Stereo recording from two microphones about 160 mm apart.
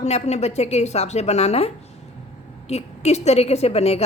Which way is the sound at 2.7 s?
40° left (ahead or behind).